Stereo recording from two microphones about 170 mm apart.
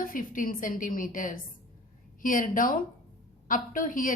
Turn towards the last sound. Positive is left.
turn(degrees=50)  # may be behind; listen again after turning